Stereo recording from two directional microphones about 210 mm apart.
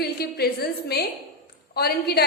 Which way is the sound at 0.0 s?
50° left (ahead or behind).